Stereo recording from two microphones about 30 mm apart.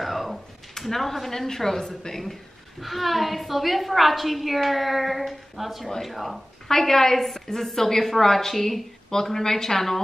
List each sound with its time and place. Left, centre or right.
0.0 s a sound: centre
0.7 s a woman's voice: centre
2.8 s a woman's voice: centre
6.7 s a woman's voice: centre
9.1 s a woman's voice: centre